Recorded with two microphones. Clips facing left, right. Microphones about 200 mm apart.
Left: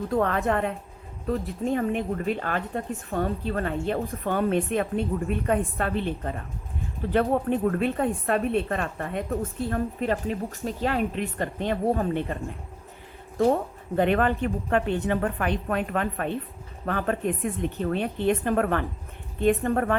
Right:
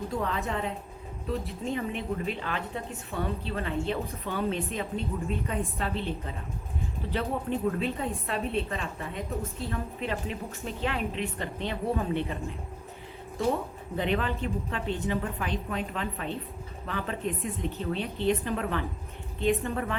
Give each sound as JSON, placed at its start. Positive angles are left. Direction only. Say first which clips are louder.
{"t": 0.1, "sound": "a woman's voice", "louder": "left 9 dB", "side_deg": 55}
{"t": 13.4, "sound": "a woman's voice", "louder": "left 6 dB", "side_deg": 50}